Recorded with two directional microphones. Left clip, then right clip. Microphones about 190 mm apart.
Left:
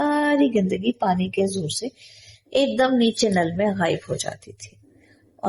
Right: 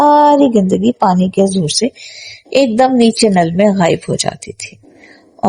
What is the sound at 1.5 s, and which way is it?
Speech, 45° right (ahead or behind).